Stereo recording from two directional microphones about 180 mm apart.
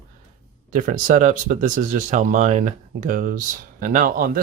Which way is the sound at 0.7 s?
45° right (ahead or behind).